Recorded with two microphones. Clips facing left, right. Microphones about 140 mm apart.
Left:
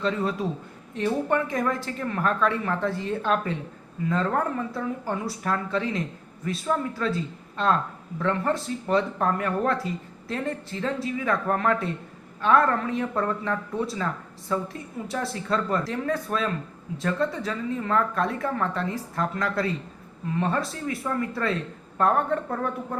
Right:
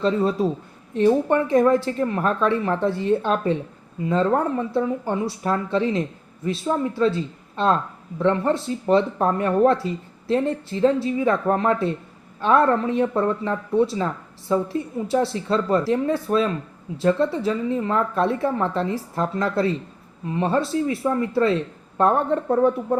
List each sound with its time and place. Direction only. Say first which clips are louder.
0.0 s a man's voice: right 6 dB; 30° right (ahead or behind)